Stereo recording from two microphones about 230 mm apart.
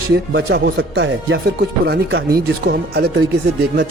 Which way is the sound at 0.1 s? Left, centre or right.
Right.